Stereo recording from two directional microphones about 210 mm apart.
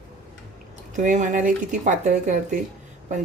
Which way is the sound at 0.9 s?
35° right (ahead or behind).